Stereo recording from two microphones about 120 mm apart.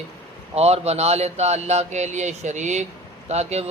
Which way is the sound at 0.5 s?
60° right (ahead or behind).